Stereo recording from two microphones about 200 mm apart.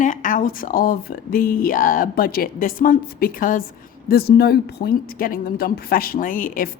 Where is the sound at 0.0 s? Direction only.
40° left (ahead or behind).